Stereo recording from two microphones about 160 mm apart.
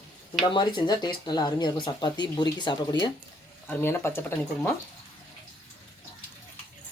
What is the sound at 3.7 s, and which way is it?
Speech, 15° left (ahead or behind).